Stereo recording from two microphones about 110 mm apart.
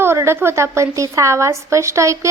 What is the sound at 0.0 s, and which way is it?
A woman's voice, 25° right (ahead or behind).